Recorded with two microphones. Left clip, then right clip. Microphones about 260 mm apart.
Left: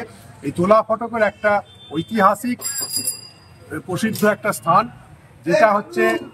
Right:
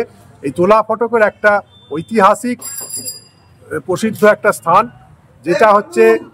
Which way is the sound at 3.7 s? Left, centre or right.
Centre.